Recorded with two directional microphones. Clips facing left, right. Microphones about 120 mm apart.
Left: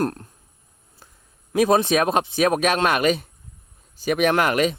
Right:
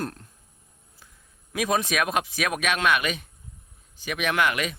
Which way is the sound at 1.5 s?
35° left (ahead or behind).